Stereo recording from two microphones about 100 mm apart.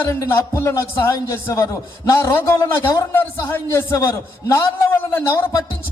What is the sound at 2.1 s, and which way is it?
A man's voice, 35° left (ahead or behind).